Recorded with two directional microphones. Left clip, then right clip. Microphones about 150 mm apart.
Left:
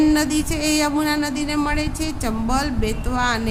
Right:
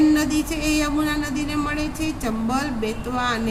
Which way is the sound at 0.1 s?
45° left (ahead or behind).